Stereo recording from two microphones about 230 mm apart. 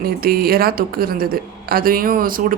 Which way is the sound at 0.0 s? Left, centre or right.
Right.